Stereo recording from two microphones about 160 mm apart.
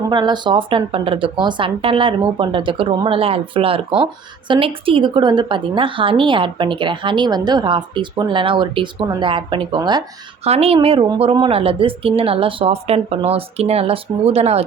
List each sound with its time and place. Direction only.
0.1 s speech: 30° right (ahead or behind)
10.4 s speech: 40° right (ahead or behind)